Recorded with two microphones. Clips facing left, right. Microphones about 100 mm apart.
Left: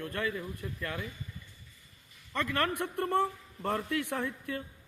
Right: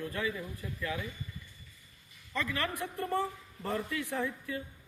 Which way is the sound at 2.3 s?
60° left (ahead or behind).